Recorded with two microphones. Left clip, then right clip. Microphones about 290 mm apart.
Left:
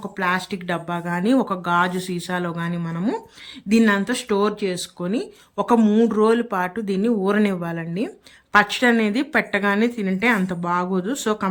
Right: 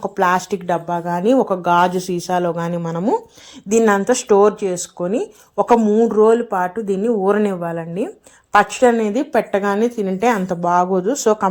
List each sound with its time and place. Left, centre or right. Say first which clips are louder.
0.0 s a woman's voice: right 6 dB; centre